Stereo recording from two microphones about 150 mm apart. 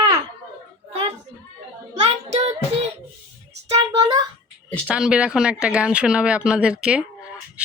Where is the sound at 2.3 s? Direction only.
45° right (ahead or behind).